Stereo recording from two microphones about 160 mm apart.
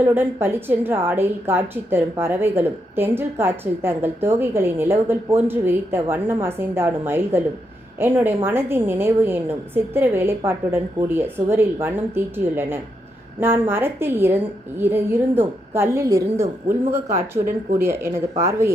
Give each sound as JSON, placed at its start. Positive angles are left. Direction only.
{"t": 0.0, "sound": "a woman's voice", "side_deg": -15}
{"t": 17.7, "sound": "a woman's voice", "side_deg": -15}